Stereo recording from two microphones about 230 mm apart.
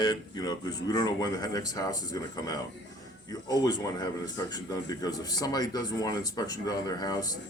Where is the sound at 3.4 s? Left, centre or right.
Centre.